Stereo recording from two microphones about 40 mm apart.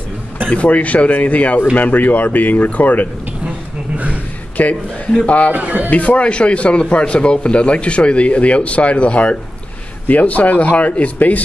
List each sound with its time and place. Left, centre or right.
0.5 s a man's voice: left
3.4 s a sound: right
4.6 s a man's voice: left
5.5 s a man's voice: right
5.9 s a man's voice: left